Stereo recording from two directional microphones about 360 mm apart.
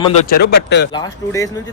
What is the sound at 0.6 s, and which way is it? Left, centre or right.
Speech, left.